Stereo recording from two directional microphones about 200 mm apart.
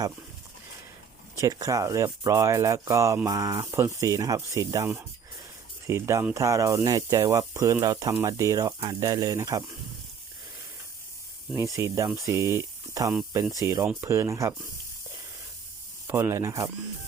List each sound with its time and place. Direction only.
1.4 s speech: 15° right (ahead or behind)
11.5 s speech: 15° right (ahead or behind)
16.0 s speech: 15° right (ahead or behind)